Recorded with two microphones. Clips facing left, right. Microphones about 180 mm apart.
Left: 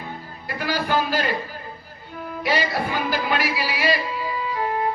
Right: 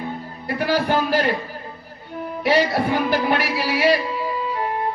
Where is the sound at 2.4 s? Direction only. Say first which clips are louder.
Right 5 dB; 60° right (ahead or behind).